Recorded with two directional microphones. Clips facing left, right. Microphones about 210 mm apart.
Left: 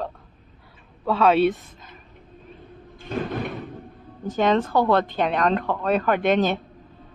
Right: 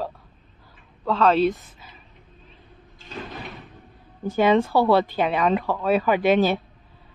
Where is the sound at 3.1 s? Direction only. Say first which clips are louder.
Left 9 dB; 55° left (ahead or behind).